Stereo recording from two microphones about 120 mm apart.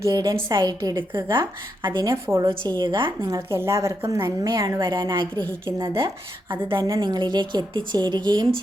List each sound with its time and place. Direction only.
0.1 s a woman's voice: 35° right (ahead or behind)
2.2 s a woman's voice: 20° right (ahead or behind)
2.5 s a woman's voice: 40° right (ahead or behind)
3.5 s a woman's voice: 20° right (ahead or behind); by 5.3 s 40° right (ahead or behind)
5.5 s a woman's voice: 20° right (ahead or behind)
6.7 s a woman's voice: 45° right (ahead or behind)